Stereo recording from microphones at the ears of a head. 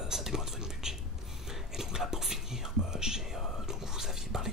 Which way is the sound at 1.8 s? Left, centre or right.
Centre.